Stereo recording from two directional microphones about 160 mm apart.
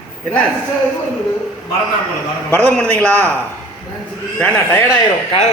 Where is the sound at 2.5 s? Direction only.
5° left (ahead or behind).